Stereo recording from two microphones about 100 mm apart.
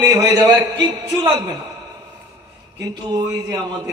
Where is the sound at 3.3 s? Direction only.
30° right (ahead or behind).